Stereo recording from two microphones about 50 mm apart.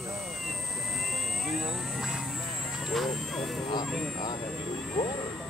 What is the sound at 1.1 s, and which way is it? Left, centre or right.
Vehicle, centre.